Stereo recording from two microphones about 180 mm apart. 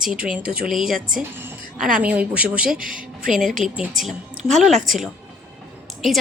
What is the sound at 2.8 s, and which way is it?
Speech, 50° right (ahead or behind).